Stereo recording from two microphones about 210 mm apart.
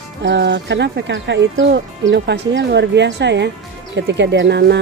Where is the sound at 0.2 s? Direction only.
55° right (ahead or behind).